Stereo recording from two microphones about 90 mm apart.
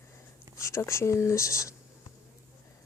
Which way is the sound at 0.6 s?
35° left (ahead or behind).